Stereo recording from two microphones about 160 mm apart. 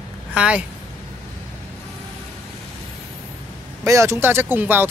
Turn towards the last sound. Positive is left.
turn(degrees=-10)  # may be behind; listen again after turning